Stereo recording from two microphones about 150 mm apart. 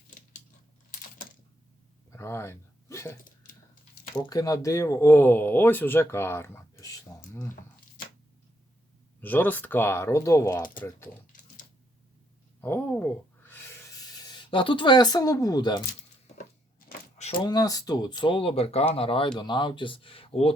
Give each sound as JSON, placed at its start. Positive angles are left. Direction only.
{"t": 2.0, "sound": "speech", "side_deg": 15}
{"t": 4.3, "sound": "speech", "side_deg": 25}
{"t": 9.2, "sound": "speech", "side_deg": 10}
{"t": 12.6, "sound": "a sound", "side_deg": 15}
{"t": 17.4, "sound": "speech", "side_deg": 25}